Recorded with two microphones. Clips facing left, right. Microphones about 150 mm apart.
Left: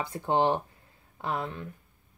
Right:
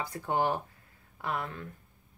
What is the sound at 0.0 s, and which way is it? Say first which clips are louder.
Speech: left 4 dB; 25° left (ahead or behind).